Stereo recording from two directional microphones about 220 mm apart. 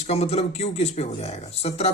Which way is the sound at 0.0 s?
30° left (ahead or behind).